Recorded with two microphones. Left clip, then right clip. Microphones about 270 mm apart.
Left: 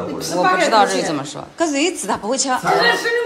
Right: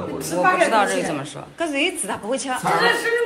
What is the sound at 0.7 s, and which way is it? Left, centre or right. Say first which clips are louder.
A woman's voice: left 4 dB; centre.